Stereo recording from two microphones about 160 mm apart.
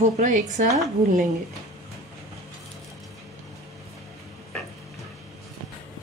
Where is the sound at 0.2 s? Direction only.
50° right (ahead or behind).